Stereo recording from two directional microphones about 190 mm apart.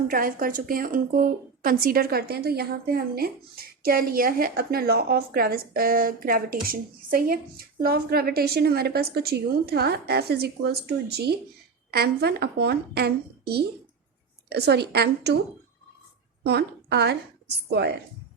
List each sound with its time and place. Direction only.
0.1 s a woman's voice: 50° right (ahead or behind)
16.4 s a woman's voice: 60° right (ahead or behind)